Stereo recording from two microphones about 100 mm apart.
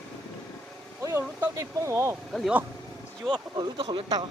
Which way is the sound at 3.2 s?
50° right (ahead or behind).